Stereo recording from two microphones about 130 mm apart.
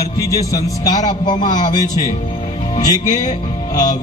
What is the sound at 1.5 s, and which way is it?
Speech, 70° left (ahead or behind).